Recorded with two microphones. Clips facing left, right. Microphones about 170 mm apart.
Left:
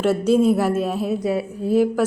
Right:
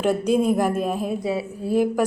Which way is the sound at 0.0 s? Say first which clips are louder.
Left 3 dB; 15° right (ahead or behind).